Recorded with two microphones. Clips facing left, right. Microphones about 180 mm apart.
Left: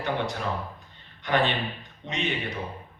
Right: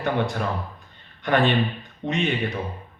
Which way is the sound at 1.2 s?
50° right (ahead or behind).